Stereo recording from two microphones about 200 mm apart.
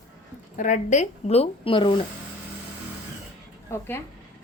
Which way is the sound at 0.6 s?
35° left (ahead or behind).